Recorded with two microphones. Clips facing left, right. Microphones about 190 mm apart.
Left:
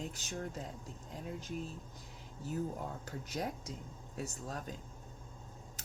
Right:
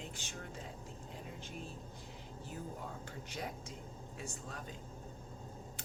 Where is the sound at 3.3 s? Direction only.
40° left (ahead or behind).